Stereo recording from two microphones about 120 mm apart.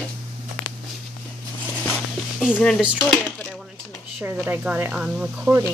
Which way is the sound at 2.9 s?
10° left (ahead or behind).